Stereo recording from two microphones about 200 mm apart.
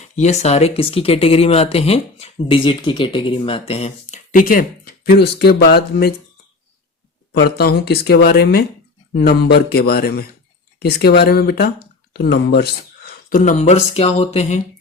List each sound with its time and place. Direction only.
0.0 s speech: 35° left (ahead or behind); by 6.1 s 55° left (ahead or behind)
7.4 s speech: 50° left (ahead or behind)
13.4 s speech: 35° left (ahead or behind)